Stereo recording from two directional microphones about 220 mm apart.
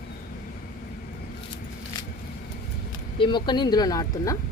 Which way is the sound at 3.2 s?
20° left (ahead or behind).